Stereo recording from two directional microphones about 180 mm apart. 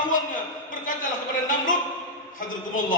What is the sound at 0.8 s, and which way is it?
Speech, 45° left (ahead or behind).